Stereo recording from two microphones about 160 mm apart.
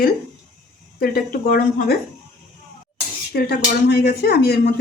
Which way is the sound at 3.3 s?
80° left.